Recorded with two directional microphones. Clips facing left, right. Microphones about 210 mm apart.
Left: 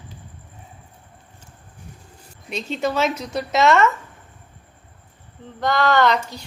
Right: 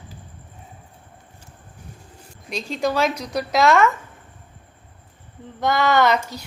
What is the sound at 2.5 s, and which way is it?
Speech, centre (ahead or behind).